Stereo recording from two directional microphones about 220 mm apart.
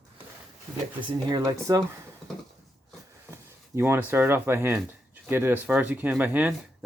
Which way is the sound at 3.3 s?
10° right (ahead or behind).